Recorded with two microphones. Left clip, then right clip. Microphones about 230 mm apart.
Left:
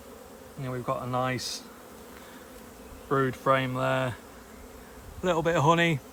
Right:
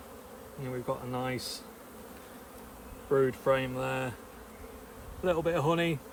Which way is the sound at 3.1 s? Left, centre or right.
Left.